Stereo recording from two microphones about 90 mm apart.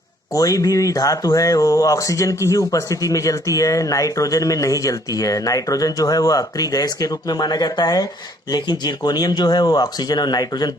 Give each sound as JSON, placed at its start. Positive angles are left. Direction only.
{"t": 0.3, "sound": "speech", "side_deg": 40}